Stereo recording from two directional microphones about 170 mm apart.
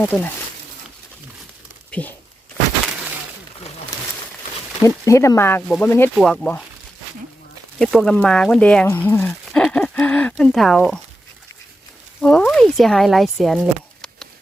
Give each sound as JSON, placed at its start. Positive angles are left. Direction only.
{"t": 0.0, "sound": "speech", "side_deg": 10}
{"t": 1.9, "sound": "speech", "side_deg": 10}
{"t": 4.8, "sound": "speech", "side_deg": 20}
{"t": 6.1, "sound": "speech", "side_deg": 0}
{"t": 7.8, "sound": "speech", "side_deg": 0}
{"t": 12.2, "sound": "speech", "side_deg": 5}